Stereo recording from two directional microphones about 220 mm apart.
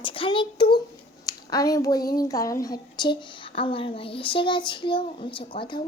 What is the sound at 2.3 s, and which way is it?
A child's voice, 15° left (ahead or behind).